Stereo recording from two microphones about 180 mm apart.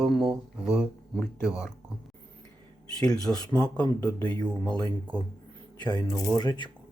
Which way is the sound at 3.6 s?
20° left (ahead or behind).